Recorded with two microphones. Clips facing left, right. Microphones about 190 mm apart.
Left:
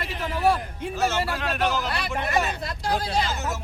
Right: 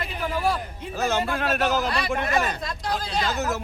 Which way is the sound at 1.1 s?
50° right (ahead or behind).